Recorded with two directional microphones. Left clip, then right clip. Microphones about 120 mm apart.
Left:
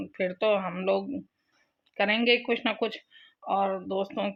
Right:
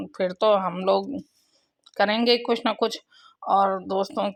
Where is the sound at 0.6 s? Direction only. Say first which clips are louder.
Right 6 dB; 20° right (ahead or behind).